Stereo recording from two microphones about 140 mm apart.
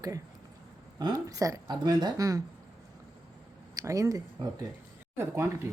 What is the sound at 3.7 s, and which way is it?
Speech, 25° right (ahead or behind).